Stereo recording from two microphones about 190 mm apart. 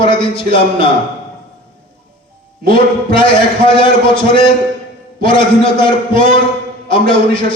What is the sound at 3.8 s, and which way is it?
A man's voice, 25° left (ahead or behind).